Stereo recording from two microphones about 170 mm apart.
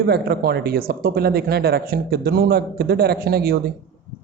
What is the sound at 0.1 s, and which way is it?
Speech, 70° right (ahead or behind).